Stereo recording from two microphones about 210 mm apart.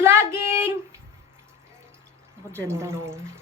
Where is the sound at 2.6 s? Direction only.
10° right (ahead or behind).